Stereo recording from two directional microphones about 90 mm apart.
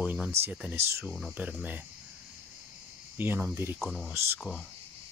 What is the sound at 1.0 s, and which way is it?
Speech, centre (ahead or behind).